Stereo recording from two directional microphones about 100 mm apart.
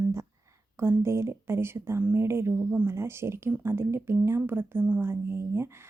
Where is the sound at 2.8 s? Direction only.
25° right (ahead or behind).